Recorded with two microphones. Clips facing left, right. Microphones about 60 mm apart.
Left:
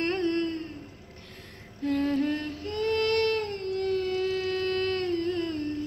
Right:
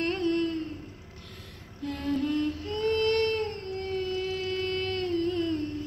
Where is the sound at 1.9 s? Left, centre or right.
Left.